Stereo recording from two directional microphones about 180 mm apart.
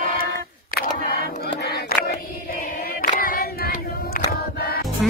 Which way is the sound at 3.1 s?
55° left (ahead or behind).